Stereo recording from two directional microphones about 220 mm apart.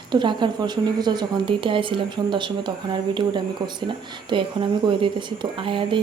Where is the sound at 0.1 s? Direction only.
20° right (ahead or behind).